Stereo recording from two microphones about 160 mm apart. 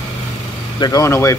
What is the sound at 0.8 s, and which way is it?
Speech, 20° left (ahead or behind).